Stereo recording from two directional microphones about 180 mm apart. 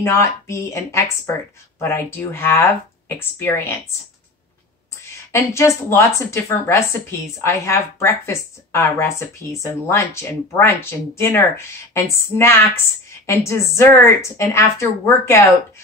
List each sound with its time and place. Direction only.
0.0 s a woman's voice: 15° left (ahead or behind)
5.3 s a woman's voice: 15° left (ahead or behind)